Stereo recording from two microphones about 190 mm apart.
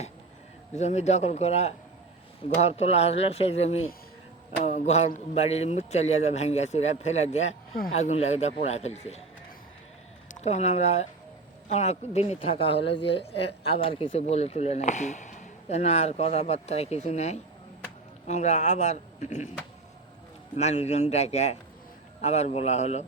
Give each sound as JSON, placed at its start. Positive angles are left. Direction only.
{"t": 0.8, "sound": "speech", "side_deg": 35}
{"t": 10.3, "sound": "speech", "side_deg": 35}
{"t": 12.7, "sound": "a woman's voice", "side_deg": 65}
{"t": 13.1, "sound": "speech", "side_deg": 30}
{"t": 20.6, "sound": "speech", "side_deg": 35}